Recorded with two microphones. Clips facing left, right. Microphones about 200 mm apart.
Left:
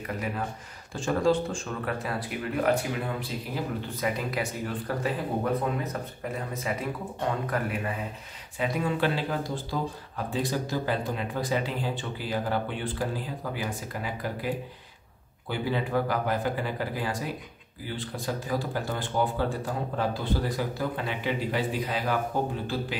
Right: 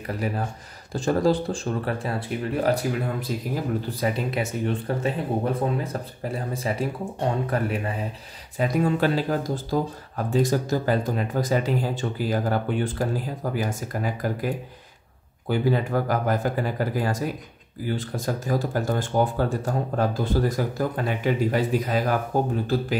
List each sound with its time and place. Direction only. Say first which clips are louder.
0.9 s speech: right 3 dB; 35° right (ahead or behind)
8.5 s speech: right 5 dB; 40° right (ahead or behind)